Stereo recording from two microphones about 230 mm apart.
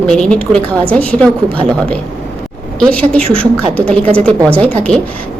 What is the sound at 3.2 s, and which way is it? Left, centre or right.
A woman's voice, right.